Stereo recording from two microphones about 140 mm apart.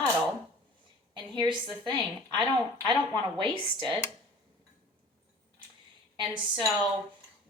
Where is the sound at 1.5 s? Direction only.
35° right (ahead or behind).